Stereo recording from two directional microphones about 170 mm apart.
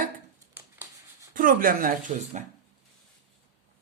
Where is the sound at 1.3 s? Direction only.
55° right (ahead or behind).